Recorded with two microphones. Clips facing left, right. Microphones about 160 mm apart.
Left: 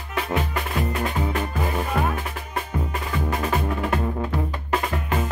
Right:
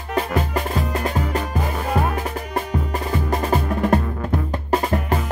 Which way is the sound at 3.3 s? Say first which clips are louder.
Right 3 dB; 40° right (ahead or behind).